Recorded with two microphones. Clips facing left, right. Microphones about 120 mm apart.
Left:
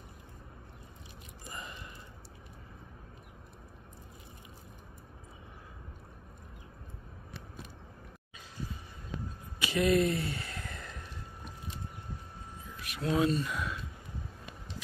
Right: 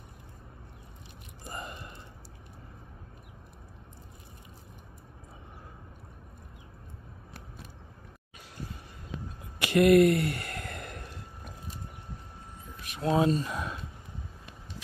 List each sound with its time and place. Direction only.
1.4 s gasp: 50° right (ahead or behind)
9.6 s sigh: 65° right (ahead or behind)
12.8 s speech: 35° right (ahead or behind)